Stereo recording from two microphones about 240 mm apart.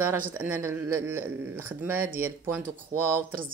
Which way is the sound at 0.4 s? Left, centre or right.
Centre.